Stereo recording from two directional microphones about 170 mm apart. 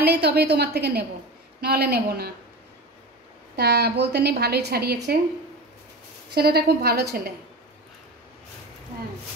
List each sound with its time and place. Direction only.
0.0 s a woman's voice: 70° right (ahead or behind)
3.5 s a woman's voice: 75° right (ahead or behind)
6.3 s a woman's voice: 70° right (ahead or behind)